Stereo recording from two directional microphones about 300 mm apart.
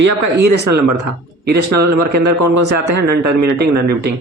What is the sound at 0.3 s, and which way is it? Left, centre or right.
Speech, right.